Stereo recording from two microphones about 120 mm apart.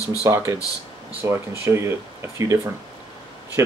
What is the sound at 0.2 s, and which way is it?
Speech, 25° right (ahead or behind).